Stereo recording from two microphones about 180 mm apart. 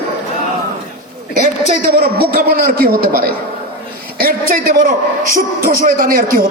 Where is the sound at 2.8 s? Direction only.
55° right (ahead or behind).